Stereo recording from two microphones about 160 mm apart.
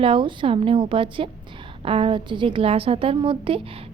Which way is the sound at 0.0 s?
30° right (ahead or behind).